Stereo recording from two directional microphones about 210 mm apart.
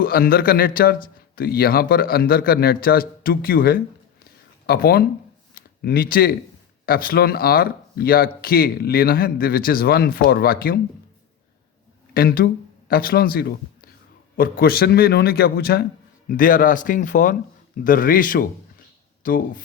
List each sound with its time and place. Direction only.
0.0 s speech: 45° left (ahead or behind)
4.2 s a sound: 45° left (ahead or behind)
5.5 s speech: 45° left (ahead or behind)
12.1 s speech: 45° left (ahead or behind)